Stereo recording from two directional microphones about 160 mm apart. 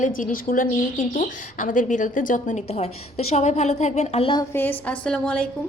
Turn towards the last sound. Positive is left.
turn(degrees=5)  # may be behind; listen again after turning